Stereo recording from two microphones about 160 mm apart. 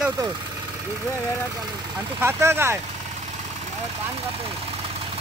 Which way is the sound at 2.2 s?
15° right (ahead or behind).